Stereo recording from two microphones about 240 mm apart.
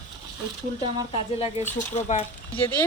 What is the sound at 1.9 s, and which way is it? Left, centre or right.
Speech, left.